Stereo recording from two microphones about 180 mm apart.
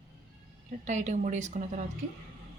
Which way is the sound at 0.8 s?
40° right (ahead or behind).